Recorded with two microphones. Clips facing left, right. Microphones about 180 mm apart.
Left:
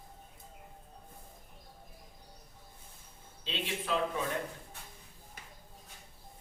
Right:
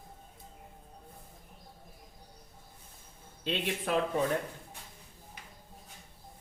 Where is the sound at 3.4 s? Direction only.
55° right (ahead or behind).